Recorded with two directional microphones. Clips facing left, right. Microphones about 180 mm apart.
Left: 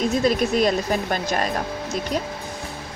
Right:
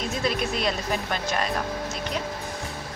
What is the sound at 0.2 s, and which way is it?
Speech, 45° left (ahead or behind).